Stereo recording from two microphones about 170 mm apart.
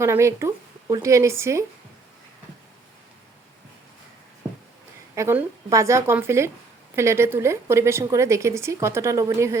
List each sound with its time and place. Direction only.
0.0 s a woman's voice: 15° right (ahead or behind)
5.1 s a woman's voice: 15° right (ahead or behind)